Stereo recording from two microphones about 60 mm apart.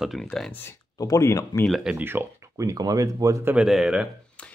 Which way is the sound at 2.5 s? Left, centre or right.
Right.